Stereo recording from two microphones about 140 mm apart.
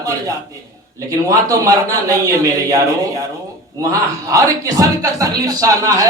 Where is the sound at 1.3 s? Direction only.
25° right (ahead or behind).